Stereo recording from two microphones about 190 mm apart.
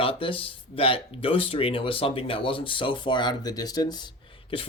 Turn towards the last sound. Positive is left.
turn(degrees=25)  # may be behind; listen again after turning